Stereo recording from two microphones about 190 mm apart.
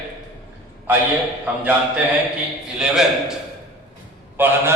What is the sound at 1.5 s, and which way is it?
Speech, 10° right (ahead or behind).